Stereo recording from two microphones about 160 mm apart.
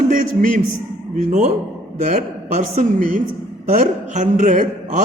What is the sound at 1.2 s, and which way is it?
A man's voice, 45° right (ahead or behind).